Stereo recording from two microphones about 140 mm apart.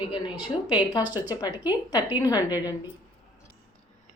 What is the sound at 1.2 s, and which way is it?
A woman's voice, 30° left (ahead or behind).